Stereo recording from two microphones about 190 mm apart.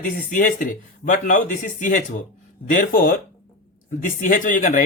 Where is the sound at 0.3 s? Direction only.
45° left (ahead or behind).